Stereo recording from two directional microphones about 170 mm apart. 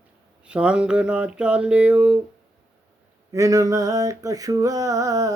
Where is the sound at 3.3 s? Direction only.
20° right (ahead or behind).